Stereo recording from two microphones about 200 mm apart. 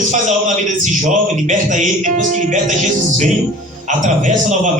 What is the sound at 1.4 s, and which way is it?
A man's voice, 40° right (ahead or behind).